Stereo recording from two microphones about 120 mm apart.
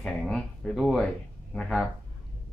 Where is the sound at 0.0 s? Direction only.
5° left (ahead or behind).